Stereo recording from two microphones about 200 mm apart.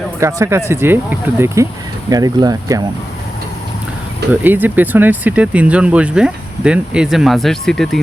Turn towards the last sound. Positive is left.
turn(degrees=0)  # may be behind; listen again after turning